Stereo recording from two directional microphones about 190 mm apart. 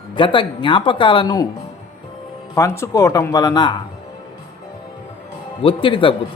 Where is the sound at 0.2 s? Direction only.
25° left (ahead or behind).